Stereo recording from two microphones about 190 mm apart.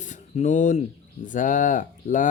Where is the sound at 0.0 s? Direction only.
40° left (ahead or behind).